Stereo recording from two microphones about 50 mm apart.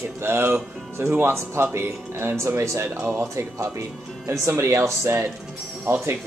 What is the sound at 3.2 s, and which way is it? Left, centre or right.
Speech, right.